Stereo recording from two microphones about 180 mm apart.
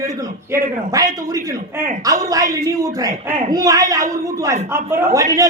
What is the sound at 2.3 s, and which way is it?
A man's voice, 20° right (ahead or behind).